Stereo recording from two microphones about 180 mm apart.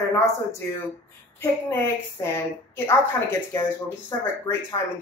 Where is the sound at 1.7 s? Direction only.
15° left (ahead or behind).